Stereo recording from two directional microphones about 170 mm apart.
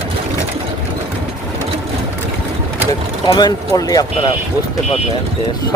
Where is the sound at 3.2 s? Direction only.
25° left (ahead or behind).